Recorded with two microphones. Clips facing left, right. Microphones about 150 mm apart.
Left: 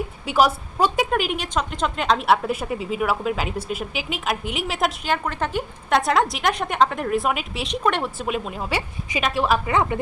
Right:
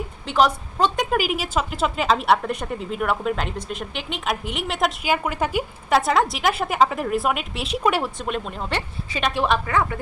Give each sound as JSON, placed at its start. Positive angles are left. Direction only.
{"t": 0.3, "sound": "a woman's voice", "side_deg": 5}
{"t": 1.1, "sound": "a woman's voice", "side_deg": -5}
{"t": 9.6, "sound": "a woman's voice", "side_deg": 20}